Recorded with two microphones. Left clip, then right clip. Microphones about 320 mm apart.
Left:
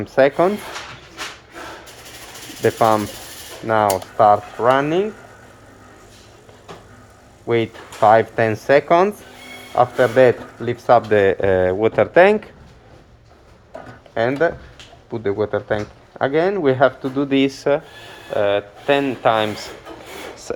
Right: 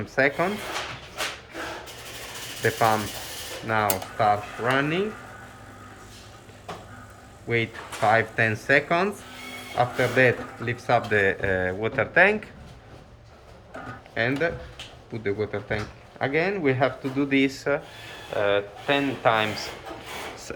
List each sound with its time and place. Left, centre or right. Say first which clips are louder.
0.0 s speech: left 8 dB; centre
2.6 s speech: left 7 dB; left
7.4 s speech: left 7 dB; centre
14.1 s speech: left 7 dB; centre